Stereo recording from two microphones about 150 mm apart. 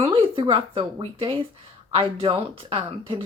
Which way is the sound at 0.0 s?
35° right (ahead or behind).